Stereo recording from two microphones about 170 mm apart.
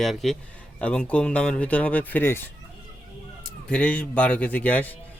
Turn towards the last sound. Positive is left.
turn(degrees=10)  # may be behind; listen again after turning